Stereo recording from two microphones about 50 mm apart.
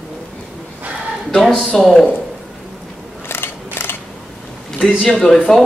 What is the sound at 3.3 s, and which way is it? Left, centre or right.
Scissors, left.